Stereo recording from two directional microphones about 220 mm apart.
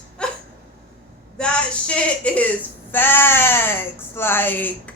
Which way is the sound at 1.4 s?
5° left (ahead or behind).